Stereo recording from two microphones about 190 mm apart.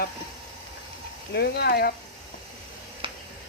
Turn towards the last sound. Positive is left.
turn(degrees=-25)  # may be behind; listen again after turning